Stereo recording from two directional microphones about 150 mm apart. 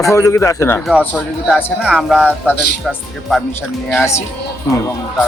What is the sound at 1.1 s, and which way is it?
Speech, centre (ahead or behind).